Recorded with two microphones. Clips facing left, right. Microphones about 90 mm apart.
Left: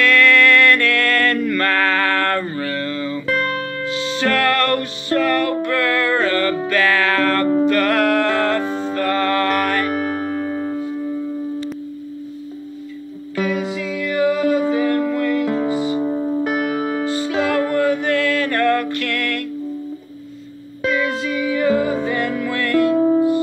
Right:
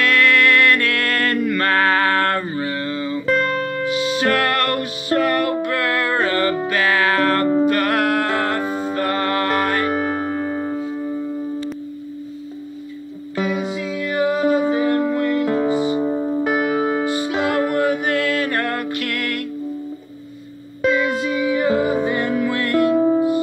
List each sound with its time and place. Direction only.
0.0 s music: 15° right (ahead or behind)
3.3 s music: centre (ahead or behind)
3.8 s music: 15° right (ahead or behind)
9.9 s music: 5° right (ahead or behind)
10.8 s music: 20° right (ahead or behind)
13.4 s music: 20° right (ahead or behind)
20.8 s music: 15° right (ahead or behind)